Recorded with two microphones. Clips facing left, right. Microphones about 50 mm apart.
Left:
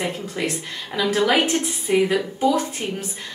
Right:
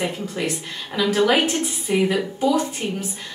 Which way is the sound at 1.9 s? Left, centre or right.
Centre.